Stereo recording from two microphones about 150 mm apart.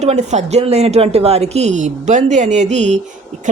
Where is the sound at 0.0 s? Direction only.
50° right (ahead or behind).